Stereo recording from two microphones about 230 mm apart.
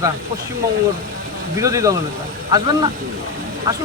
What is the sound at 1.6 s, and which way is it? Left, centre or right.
Speech, centre.